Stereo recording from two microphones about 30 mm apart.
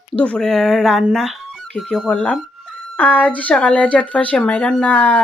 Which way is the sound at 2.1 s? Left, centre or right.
Left.